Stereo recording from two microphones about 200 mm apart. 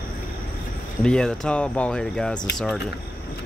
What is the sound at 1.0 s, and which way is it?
Speech, 5° left (ahead or behind).